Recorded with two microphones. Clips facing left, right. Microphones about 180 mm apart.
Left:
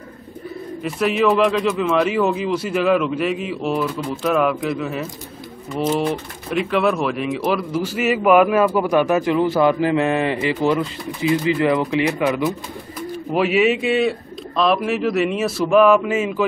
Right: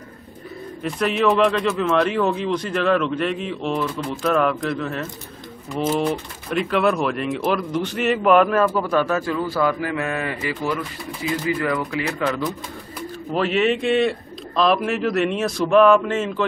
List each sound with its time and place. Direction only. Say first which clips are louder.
0.8 s speech: left 2 dB; 5° left (ahead or behind); by 12.2 s 20° left (ahead or behind)
13.4 s speech: left 3 dB; 5° left (ahead or behind)